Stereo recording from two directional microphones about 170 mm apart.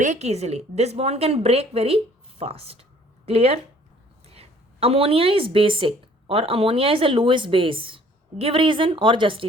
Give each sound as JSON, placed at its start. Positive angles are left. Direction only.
{"t": 0.0, "sound": "a woman's voice", "side_deg": -40}